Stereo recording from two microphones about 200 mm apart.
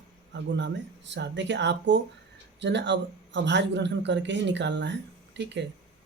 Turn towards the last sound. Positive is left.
turn(degrees=-60)  # may be behind; listen again after turning